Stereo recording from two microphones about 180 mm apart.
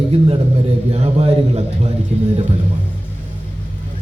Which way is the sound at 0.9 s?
35° right (ahead or behind).